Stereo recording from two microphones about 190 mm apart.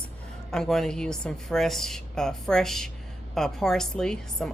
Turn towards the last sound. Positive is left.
turn(degrees=5)  # may be behind; listen again after turning